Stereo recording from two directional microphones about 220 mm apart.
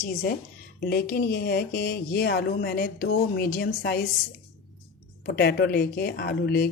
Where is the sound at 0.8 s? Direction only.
45° left (ahead or behind).